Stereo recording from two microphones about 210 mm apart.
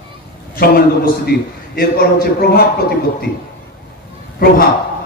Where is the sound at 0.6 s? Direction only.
45° left (ahead or behind).